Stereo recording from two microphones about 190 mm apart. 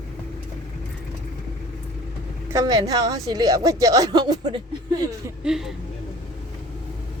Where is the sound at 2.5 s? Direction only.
20° right (ahead or behind).